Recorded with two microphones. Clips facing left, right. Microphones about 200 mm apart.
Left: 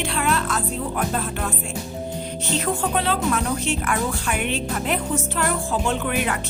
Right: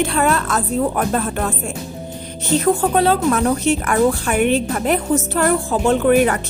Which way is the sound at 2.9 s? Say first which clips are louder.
Right 7 dB; 45° right (ahead or behind).